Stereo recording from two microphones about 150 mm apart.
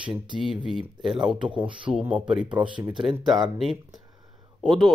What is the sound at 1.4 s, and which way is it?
Speech, 35° right (ahead or behind).